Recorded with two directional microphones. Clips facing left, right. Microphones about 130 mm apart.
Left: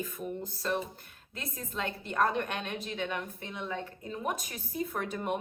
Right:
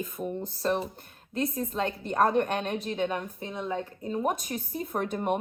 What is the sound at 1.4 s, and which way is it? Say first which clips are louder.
Speech: right 11 dB; 25° right (ahead or behind).